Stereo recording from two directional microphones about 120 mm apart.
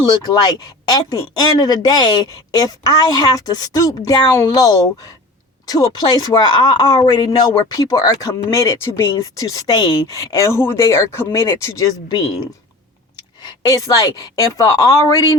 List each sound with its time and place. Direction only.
0.0 s speech: 35° left (ahead or behind)
13.4 s speech: 30° left (ahead or behind)